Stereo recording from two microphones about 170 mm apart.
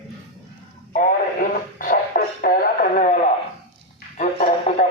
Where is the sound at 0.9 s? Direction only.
50° left (ahead or behind).